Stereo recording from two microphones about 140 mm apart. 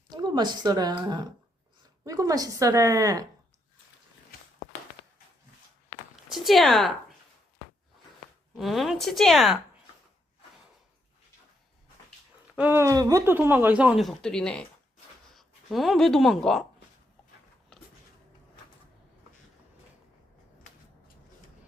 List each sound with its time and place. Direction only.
0.1 s a woman's voice: 30° right (ahead or behind)
6.3 s a woman's voice: centre (ahead or behind)
8.5 s a woman's voice: centre (ahead or behind)
12.5 s speech: 15° right (ahead or behind); by 16.6 s centre (ahead or behind)